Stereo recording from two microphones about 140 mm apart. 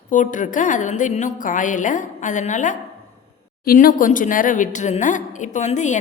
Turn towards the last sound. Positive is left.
turn(degrees=60)  # may be behind; listen again after turning